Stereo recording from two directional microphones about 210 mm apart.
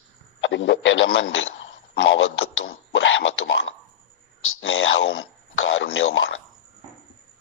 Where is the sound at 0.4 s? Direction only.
60° left (ahead or behind).